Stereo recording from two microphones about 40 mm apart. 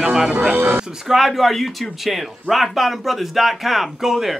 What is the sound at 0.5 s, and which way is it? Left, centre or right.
Speech, right.